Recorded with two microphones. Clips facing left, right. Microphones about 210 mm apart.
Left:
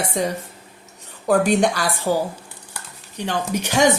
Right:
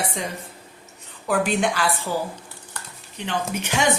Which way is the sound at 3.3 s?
40° left (ahead or behind).